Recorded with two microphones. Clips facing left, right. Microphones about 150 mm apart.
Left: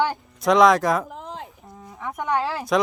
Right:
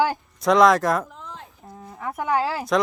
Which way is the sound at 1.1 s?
85° left.